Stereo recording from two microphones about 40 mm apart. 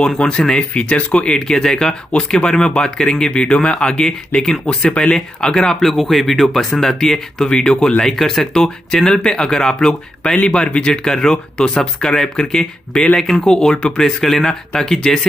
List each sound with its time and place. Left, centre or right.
0.0 s speech: left
1.5 s speech: centre